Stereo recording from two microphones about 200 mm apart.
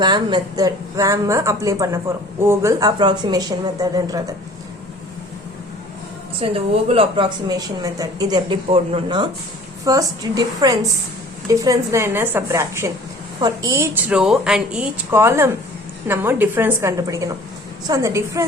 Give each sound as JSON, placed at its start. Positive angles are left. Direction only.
{"t": 0.0, "sound": "speech", "side_deg": -20}
{"t": 6.4, "sound": "speech", "side_deg": -30}